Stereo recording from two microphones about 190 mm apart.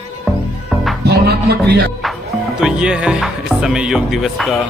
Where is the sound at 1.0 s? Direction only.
55° right (ahead or behind).